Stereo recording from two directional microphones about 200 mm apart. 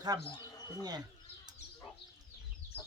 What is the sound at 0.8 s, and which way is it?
Speech, 20° right (ahead or behind).